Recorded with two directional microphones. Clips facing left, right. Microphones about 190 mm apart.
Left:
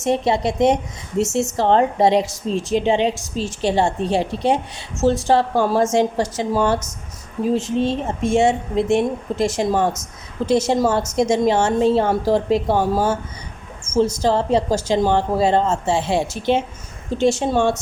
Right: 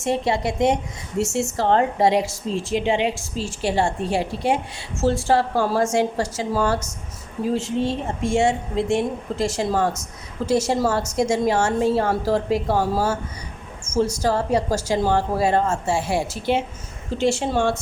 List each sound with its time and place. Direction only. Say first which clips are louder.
0.0 s a woman's voice: left 3 dB; 20° left (ahead or behind)
17.1 s speech: left 3 dB; 55° left (ahead or behind)